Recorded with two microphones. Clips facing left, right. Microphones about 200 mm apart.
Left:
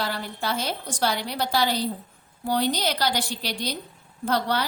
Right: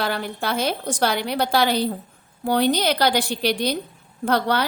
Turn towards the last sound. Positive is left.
turn(degrees=-60)  # may be behind; listen again after turning